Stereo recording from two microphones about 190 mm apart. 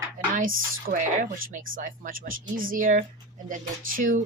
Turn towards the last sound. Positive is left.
turn(degrees=-45)  # may be behind; listen again after turning